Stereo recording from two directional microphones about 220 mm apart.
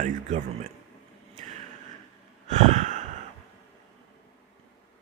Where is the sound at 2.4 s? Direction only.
35° right (ahead or behind).